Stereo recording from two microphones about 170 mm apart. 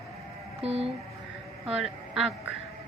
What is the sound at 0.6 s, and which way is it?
Speech, 35° right (ahead or behind).